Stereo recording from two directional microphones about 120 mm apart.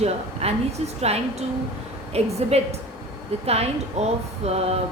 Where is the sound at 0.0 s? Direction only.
60° right (ahead or behind).